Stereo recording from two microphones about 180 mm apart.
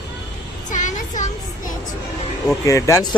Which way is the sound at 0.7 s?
45° left (ahead or behind).